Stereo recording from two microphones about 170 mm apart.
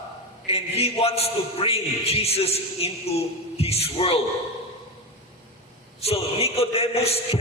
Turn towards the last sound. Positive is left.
turn(degrees=35)  # may be behind; listen again after turning